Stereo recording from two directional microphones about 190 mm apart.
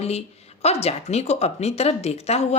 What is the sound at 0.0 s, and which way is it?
Speech, 35° left (ahead or behind).